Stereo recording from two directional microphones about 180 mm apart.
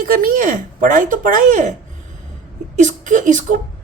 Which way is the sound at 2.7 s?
45° right (ahead or behind).